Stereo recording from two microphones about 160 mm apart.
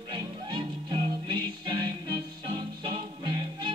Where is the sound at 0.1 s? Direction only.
30° right (ahead or behind).